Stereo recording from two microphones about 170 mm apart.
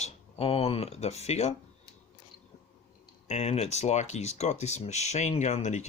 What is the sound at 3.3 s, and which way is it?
Speech, 40° left (ahead or behind).